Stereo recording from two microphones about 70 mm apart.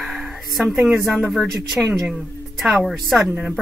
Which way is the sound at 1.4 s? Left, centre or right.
Centre.